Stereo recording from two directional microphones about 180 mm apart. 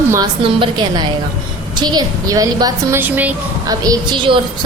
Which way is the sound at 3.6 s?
20° right (ahead or behind).